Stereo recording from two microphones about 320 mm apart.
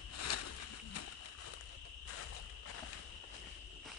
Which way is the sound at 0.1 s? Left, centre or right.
Left.